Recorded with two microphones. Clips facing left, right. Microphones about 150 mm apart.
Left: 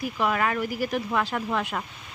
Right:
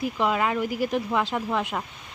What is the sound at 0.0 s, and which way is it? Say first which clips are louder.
Speech: right 1 dB; 20° right (ahead or behind).